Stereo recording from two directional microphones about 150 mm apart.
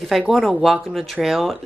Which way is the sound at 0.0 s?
Centre (ahead or behind).